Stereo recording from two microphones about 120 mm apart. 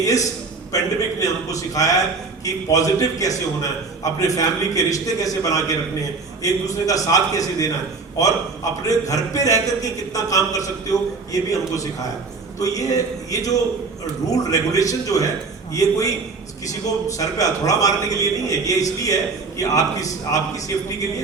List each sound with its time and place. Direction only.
0.0 s a man's voice: 30° left (ahead or behind)
8.9 s a man's voice: 30° left (ahead or behind)
17.2 s a man's voice: 30° left (ahead or behind)